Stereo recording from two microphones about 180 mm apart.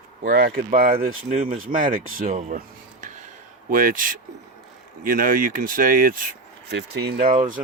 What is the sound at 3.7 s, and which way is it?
Speech, 50° right (ahead or behind).